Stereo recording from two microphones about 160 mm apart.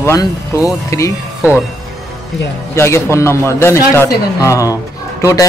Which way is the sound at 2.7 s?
15° left (ahead or behind).